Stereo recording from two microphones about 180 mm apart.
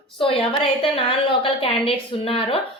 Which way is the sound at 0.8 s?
30° left (ahead or behind).